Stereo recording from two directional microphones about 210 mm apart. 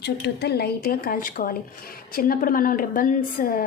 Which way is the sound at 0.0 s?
50° left (ahead or behind).